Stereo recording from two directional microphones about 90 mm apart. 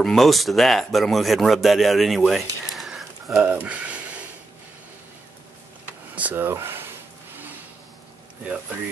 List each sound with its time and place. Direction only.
0.0 s speech: centre (ahead or behind)
3.4 s a sound: 15° right (ahead or behind)
6.1 s speech: 20° right (ahead or behind)